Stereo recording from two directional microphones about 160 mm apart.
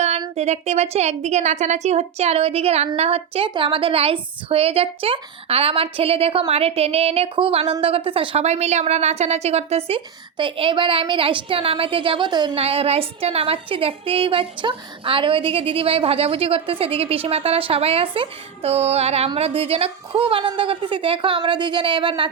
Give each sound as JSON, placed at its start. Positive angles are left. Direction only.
{"t": 0.3, "sound": "a woman's voice", "side_deg": -45}